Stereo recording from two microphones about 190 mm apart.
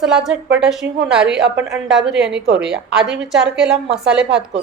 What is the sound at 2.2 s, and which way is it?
Speech, 65° right (ahead or behind).